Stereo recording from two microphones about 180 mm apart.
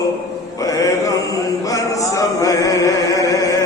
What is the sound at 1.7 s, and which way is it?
Chant, 20° left (ahead or behind).